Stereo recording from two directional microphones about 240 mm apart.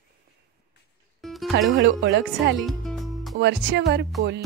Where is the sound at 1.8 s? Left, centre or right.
Right.